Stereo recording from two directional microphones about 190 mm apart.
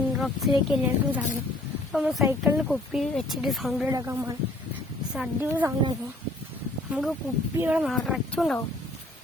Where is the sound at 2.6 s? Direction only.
Centre (ahead or behind).